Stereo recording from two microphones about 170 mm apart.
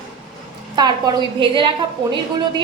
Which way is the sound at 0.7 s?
25° right (ahead or behind).